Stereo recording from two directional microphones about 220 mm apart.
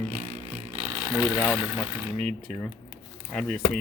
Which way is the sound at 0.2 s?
30° right (ahead or behind).